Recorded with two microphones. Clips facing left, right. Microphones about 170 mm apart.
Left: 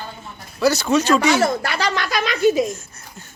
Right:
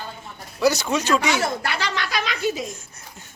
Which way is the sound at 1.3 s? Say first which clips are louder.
Left 5 dB; 40° left (ahead or behind).